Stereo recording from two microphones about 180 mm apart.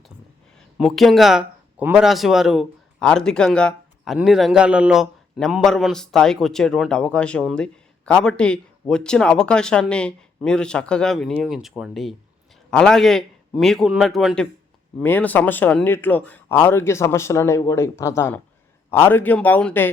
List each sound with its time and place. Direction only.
0.8 s speech: centre (ahead or behind)